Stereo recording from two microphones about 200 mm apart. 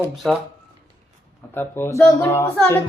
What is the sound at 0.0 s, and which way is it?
Speech, centre (ahead or behind).